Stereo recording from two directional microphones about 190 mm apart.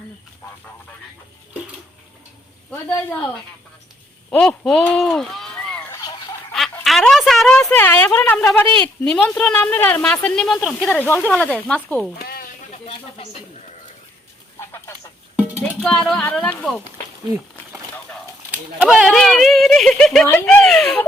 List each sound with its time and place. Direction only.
4.3 s a woman's voice: 5° left (ahead or behind)
12.3 s chicken: 50° left (ahead or behind)
12.8 s a sound: 30° left (ahead or behind)
14.6 s a sound: 15° left (ahead or behind)
15.5 s speech: 5° left (ahead or behind)
18.5 s speech: 5° right (ahead or behind)